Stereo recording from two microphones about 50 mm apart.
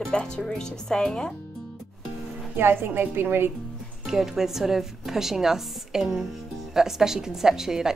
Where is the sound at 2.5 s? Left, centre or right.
Right.